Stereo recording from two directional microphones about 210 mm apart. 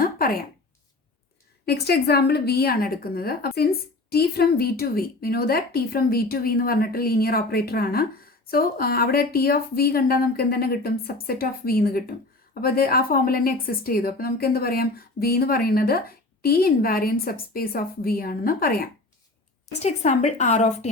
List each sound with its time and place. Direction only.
0.0 s a sound: 45° left (ahead or behind)
1.6 s a woman's voice: 50° left (ahead or behind)
19.8 s speech: 35° left (ahead or behind)